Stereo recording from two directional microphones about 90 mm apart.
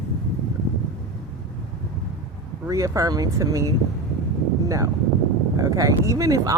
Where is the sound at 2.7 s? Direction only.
40° right (ahead or behind).